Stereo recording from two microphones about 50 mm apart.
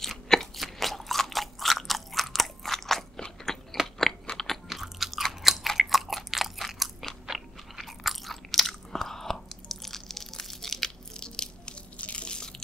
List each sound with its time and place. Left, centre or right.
0.0 s crunch: centre
4.6 s chewing: centre
7.2 s biting: centre
12.0 s drip: left